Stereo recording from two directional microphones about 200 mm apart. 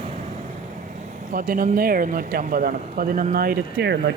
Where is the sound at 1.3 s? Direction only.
45° right (ahead or behind).